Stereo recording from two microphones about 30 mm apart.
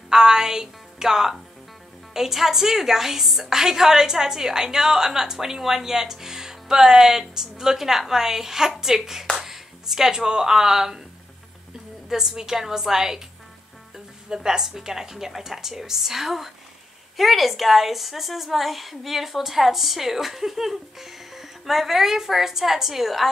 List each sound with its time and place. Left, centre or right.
0.1 s a woman's voice: centre
12.1 s a woman's voice: centre